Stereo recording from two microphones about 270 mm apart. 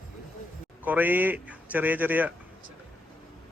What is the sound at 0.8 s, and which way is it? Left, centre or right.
A man's voice, centre.